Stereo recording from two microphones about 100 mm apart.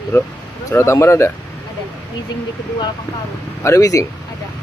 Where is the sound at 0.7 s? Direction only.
30° left (ahead or behind).